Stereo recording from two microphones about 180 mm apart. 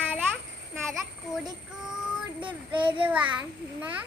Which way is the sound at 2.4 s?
10° right (ahead or behind).